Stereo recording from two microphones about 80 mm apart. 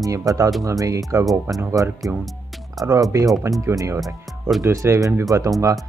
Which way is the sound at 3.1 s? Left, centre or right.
Right.